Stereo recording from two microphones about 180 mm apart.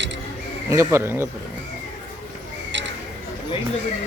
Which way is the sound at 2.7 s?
85° right.